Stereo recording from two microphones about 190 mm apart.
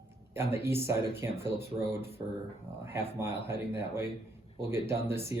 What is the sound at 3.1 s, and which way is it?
Speech, 10° right (ahead or behind).